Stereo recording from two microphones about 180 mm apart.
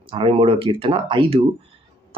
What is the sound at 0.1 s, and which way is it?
Speech, 30° right (ahead or behind).